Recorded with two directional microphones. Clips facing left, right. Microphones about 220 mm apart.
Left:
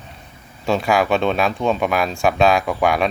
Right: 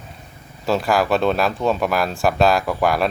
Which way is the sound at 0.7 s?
Centre (ahead or behind).